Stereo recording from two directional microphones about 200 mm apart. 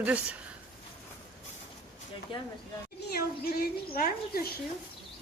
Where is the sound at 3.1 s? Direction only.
50° left (ahead or behind).